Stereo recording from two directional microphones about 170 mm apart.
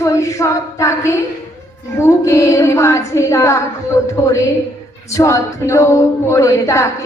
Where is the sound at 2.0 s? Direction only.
15° left (ahead or behind).